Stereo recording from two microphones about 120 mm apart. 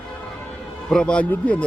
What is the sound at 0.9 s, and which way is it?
Speech, 5° left (ahead or behind).